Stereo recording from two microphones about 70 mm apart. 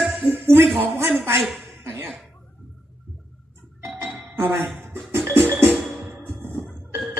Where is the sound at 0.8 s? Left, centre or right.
Right.